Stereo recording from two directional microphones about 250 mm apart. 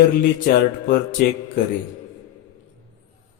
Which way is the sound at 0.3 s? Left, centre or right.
Left.